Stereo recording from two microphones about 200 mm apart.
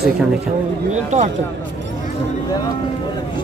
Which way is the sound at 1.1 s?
35° right (ahead or behind).